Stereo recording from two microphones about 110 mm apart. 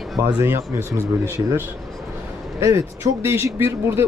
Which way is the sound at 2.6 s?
30° right (ahead or behind).